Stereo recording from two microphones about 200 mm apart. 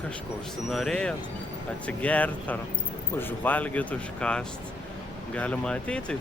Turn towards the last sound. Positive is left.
turn(degrees=5)  # may be behind; listen again after turning